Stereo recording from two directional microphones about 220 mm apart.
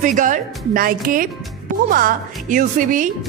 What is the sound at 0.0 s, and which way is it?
A woman's voice, 35° right (ahead or behind).